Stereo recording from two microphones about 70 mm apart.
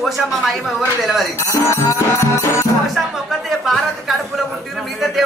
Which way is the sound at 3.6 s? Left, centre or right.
Centre.